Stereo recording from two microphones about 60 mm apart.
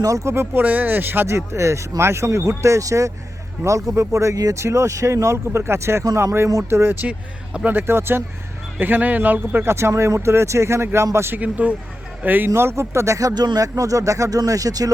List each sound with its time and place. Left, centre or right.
0.0 s speech: right
0.6 s speech: right
1.3 s speech: right
4.5 s speech: right
7.0 s speech: right
9.6 s speech: right
11.3 s speech: right
12.5 s speech: right
13.1 s speech: right